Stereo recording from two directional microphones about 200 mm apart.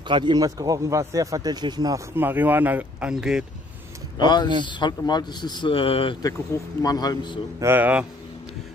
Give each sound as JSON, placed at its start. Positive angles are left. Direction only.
{"t": 0.1, "sound": "speech", "side_deg": -20}
{"t": 4.2, "sound": "a man's voice", "side_deg": 20}
{"t": 7.6, "sound": "speech", "side_deg": -10}